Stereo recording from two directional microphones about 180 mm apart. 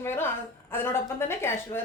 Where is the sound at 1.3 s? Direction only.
15° left (ahead or behind).